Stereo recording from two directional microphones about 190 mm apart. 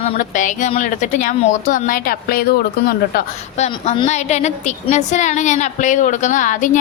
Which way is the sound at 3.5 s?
35° left (ahead or behind).